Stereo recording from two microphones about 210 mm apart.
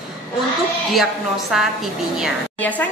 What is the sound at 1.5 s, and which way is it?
A woman's voice, centre (ahead or behind).